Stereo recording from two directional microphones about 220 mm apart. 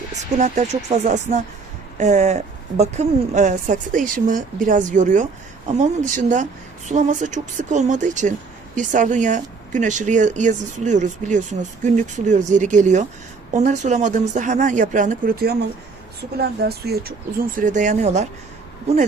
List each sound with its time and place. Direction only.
0.2 s speech: 35° right (ahead or behind)